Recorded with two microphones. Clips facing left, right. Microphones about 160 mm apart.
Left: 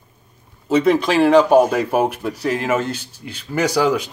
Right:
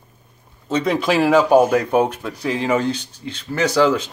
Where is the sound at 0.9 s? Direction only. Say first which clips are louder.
Right 1 dB; 5° right (ahead or behind).